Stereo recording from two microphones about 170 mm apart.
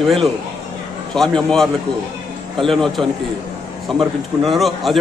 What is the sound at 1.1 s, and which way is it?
A man's voice, 5° left (ahead or behind).